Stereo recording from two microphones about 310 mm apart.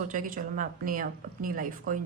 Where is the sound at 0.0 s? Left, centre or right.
Right.